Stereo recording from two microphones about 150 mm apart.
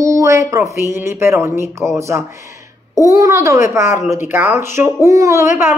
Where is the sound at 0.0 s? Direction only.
20° right (ahead or behind).